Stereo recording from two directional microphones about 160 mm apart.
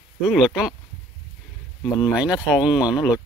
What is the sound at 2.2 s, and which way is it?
Speech, 5° right (ahead or behind).